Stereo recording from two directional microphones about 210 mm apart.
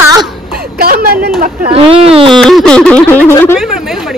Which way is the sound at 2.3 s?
Centre (ahead or behind).